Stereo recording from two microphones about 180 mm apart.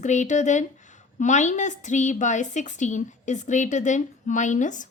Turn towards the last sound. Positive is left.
turn(degrees=45)  # may be behind; listen again after turning